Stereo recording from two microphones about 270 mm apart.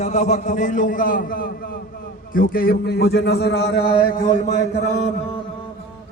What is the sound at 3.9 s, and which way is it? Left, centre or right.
Speech, centre.